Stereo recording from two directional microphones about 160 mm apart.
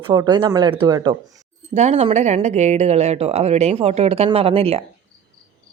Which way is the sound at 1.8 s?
45° right (ahead or behind).